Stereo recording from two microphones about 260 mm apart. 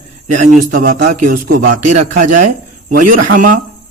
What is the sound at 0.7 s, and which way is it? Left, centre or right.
Music, right.